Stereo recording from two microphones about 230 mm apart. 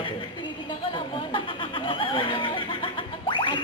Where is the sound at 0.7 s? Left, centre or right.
Left.